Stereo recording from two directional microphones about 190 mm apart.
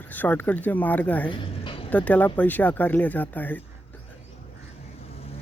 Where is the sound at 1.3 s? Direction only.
25° left (ahead or behind).